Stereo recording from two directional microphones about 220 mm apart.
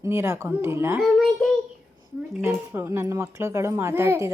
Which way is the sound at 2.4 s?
10° right (ahead or behind).